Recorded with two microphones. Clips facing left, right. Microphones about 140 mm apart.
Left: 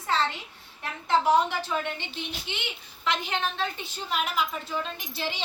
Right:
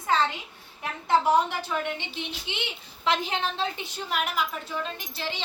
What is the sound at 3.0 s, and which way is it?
Speech, 30° right (ahead or behind).